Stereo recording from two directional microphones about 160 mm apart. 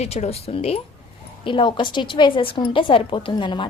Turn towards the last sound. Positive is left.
turn(degrees=30)  # may be behind; listen again after turning